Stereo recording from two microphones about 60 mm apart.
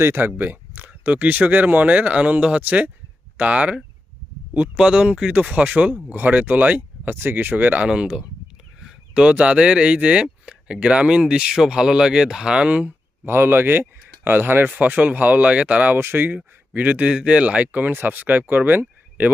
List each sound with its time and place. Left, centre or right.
0.0 s speech: right
4.8 s speech: centre
7.9 s speech: centre
13.2 s speech: right
16.0 s speech: right